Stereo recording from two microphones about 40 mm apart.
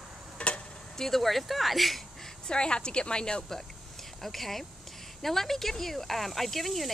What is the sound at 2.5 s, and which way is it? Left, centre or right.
Speech, left.